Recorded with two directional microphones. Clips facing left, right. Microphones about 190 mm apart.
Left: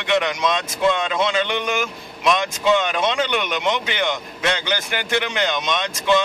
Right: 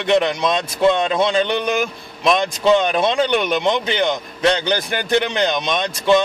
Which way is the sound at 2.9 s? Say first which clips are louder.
Right 4 dB; 15° right (ahead or behind).